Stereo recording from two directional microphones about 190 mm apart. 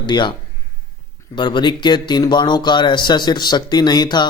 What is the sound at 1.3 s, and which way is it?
Speech, 25° left (ahead or behind).